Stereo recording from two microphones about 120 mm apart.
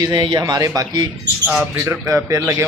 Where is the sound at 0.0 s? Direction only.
40° right (ahead or behind).